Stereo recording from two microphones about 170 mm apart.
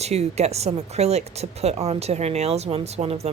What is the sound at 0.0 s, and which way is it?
A woman's voice, 40° right (ahead or behind).